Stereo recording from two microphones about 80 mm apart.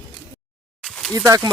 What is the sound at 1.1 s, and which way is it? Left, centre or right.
Speech, right.